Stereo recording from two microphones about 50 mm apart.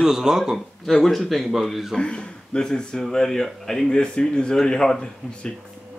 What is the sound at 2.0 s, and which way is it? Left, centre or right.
Speech, centre.